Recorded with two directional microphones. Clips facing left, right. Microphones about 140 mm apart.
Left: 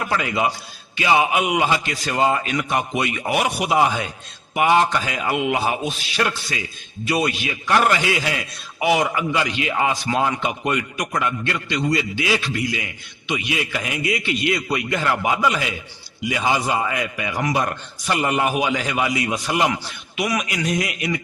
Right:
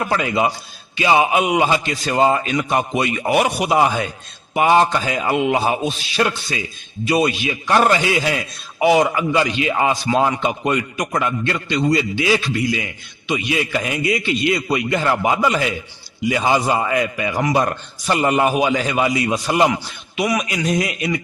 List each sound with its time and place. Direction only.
0.1 s a man's voice: 30° right (ahead or behind)